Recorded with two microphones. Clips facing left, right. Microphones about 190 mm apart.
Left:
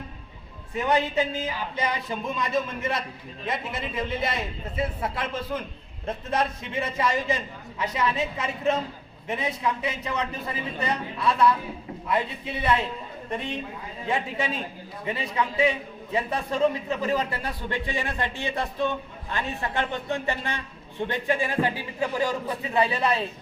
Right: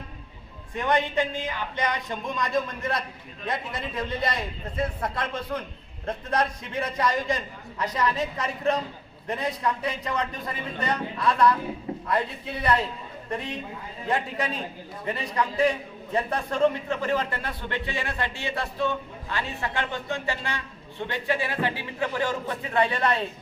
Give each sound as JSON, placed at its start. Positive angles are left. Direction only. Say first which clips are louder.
{"t": 0.8, "sound": "a man's voice", "louder": "left 1 dB", "side_deg": 10}
{"t": 14.1, "sound": "a man's voice", "louder": "even", "side_deg": 0}